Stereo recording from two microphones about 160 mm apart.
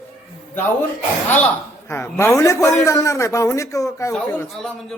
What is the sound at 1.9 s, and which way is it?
A man's voice, 15° left (ahead or behind).